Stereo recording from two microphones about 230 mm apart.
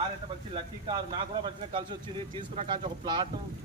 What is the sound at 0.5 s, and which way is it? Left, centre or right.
Speech, right.